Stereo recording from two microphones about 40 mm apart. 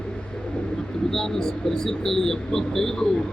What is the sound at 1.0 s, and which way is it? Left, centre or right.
Speech, centre.